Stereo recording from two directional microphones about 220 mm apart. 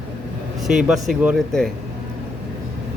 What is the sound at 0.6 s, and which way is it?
Speech, centre (ahead or behind).